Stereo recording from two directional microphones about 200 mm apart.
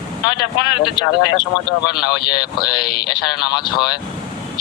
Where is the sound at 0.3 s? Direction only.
20° left (ahead or behind).